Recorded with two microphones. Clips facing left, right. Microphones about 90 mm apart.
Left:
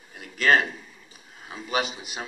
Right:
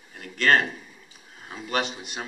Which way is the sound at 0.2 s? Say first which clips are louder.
Even; 5° left (ahead or behind).